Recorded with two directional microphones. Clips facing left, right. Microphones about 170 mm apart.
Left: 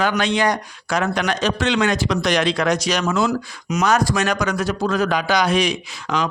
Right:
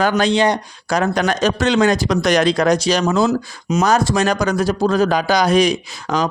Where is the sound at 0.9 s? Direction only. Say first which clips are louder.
Right 3 dB; 40° right (ahead or behind).